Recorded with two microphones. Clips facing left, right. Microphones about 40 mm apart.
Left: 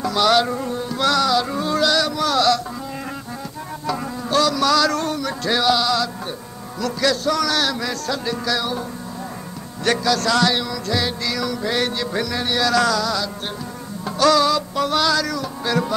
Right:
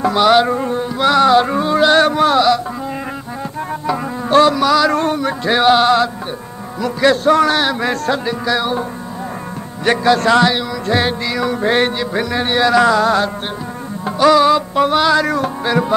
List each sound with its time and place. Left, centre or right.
0.0 s music: right
1.2 s a sound: right
2.3 s carnatic music: centre
3.8 s music: right
4.6 s a sound: centre
4.9 s music: right
6.8 s a man's voice: right
8.3 s music: right
9.8 s music: right
10.9 s a man's voice: right
12.0 s music: right
14.0 s music: right
15.6 s music: right